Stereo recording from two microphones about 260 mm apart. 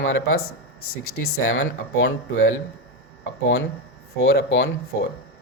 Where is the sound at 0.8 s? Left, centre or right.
Left.